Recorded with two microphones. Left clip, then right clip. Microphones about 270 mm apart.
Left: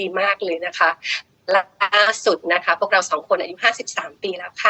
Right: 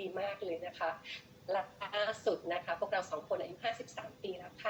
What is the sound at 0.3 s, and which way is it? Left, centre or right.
A woman's voice, left.